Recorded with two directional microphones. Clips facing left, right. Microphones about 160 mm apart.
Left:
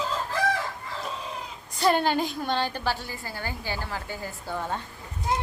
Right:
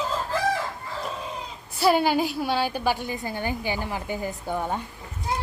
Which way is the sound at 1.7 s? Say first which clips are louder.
Right 2 dB; 5° right (ahead or behind).